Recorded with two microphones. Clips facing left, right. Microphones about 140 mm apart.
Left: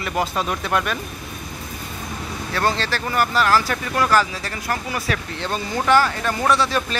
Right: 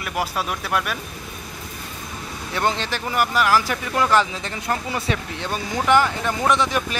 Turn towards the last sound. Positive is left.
turn(degrees=-15)  # may be behind; listen again after turning